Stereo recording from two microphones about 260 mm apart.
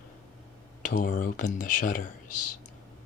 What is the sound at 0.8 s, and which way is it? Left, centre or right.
Speech, left.